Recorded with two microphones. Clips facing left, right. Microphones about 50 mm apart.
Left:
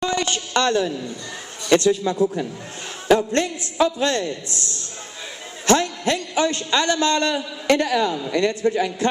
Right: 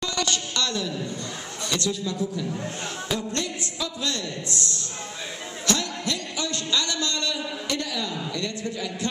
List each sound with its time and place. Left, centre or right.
0.0 s a sound: left
1.7 s a man's voice: left
4.5 s a man's voice: right
5.7 s a man's voice: left